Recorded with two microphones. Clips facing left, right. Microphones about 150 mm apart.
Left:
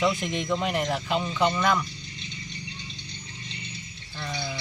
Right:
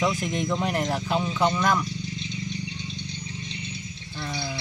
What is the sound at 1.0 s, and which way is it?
Speech, centre (ahead or behind).